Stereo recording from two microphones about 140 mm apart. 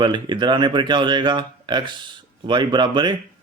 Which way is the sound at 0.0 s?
35° right (ahead or behind).